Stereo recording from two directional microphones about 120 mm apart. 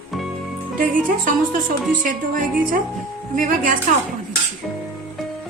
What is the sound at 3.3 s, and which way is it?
Speech, 90° right.